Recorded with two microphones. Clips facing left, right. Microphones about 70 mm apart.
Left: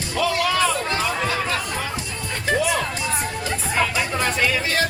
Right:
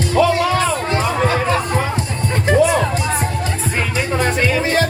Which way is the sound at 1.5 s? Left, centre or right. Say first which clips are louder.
Right 7 dB; right.